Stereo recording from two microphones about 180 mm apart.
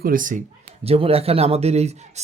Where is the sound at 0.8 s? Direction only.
35° right (ahead or behind).